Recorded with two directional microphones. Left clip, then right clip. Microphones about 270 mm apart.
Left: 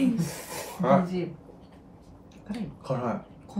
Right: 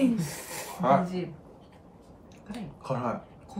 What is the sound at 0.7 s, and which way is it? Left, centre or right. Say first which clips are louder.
Speech: even; centre.